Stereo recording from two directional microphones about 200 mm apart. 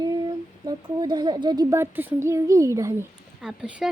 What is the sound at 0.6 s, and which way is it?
A woman's voice, 20° right (ahead or behind).